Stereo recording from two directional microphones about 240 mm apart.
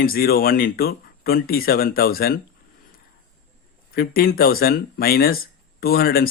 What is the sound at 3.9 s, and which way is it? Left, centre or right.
Speech, left.